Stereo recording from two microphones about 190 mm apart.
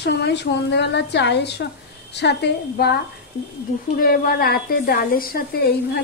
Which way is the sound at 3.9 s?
50° left (ahead or behind).